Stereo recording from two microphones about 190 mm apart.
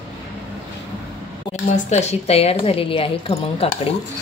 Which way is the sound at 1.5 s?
35° left (ahead or behind).